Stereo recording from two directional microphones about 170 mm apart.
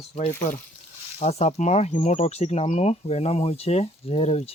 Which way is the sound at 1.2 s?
40° left (ahead or behind).